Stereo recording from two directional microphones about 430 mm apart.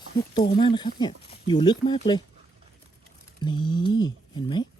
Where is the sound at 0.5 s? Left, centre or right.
Centre.